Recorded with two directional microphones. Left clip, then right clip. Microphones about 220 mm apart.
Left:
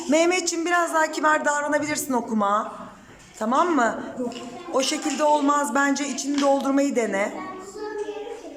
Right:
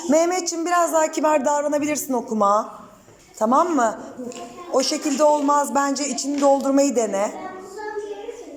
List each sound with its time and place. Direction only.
0.1 s a woman's voice: centre (ahead or behind)